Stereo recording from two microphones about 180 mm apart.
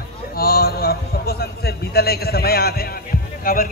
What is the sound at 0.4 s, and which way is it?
A man's voice, 60° left (ahead or behind).